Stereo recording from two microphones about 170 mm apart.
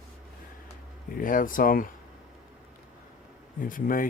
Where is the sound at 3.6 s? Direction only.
55° left (ahead or behind).